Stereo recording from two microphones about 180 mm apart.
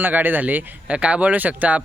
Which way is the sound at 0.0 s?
10° right (ahead or behind).